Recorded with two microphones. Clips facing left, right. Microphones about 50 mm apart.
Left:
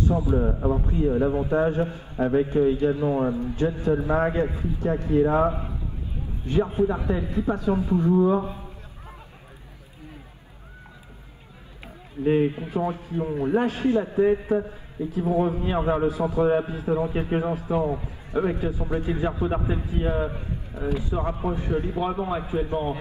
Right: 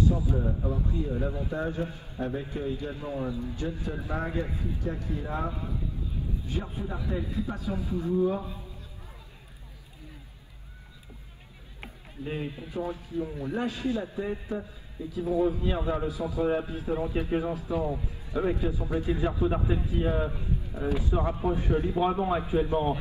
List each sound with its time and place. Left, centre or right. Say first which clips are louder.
0.0 s a man's voice: left 5 dB; left
2.1 s a man's voice: left 12 dB; left
2.9 s a man's voice: left 10 dB; left
12.2 s a man's voice: left 13 dB; left
19.4 s a man's voice: left 2 dB; left
20.9 s a man's voice: left 1 dB; centre
21.6 s speech: left 1 dB; left
22.0 s a man's voice: even; centre